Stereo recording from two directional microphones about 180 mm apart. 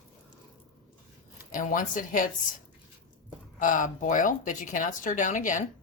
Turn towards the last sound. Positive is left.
turn(degrees=45)  # may be behind; listen again after turning